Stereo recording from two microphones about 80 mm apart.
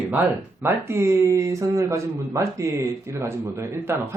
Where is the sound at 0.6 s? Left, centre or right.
Right.